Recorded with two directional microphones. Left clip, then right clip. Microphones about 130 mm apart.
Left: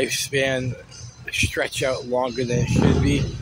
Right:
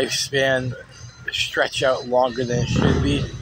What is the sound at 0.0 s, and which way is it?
Speech, 15° left (ahead or behind).